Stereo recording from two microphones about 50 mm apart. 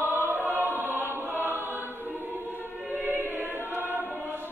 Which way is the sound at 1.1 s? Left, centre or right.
Right.